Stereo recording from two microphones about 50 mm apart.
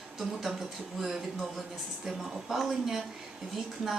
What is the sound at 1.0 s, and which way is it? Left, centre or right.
A woman's voice, centre.